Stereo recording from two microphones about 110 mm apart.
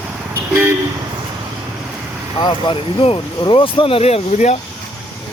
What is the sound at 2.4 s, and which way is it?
Speech, 50° left (ahead or behind).